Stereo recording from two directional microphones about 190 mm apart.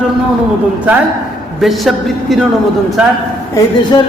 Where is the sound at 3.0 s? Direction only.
5° right (ahead or behind).